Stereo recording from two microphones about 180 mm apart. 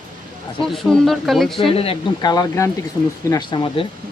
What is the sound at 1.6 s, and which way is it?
Speech, 30° left (ahead or behind).